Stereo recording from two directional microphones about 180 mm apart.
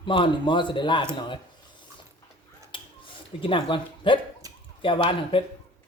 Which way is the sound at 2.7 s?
30° left (ahead or behind).